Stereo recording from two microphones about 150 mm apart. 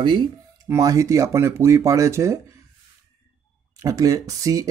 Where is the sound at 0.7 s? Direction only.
20° right (ahead or behind).